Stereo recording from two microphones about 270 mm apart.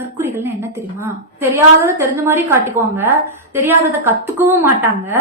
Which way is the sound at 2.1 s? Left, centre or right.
Centre.